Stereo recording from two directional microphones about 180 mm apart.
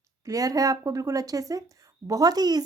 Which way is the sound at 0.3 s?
20° right (ahead or behind).